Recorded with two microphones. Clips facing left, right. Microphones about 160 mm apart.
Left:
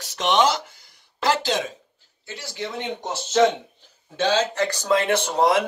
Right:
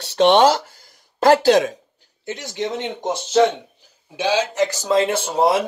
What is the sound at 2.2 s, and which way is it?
Speech, 20° right (ahead or behind).